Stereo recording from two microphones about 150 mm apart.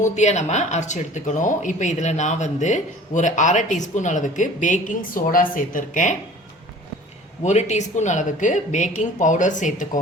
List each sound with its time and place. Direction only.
0.0 s speech: 50° left (ahead or behind)
7.4 s speech: 50° left (ahead or behind)